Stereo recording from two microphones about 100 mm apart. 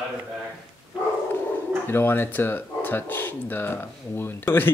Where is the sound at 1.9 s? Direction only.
20° left (ahead or behind).